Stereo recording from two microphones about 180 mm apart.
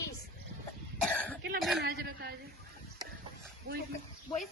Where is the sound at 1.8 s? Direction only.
60° right (ahead or behind).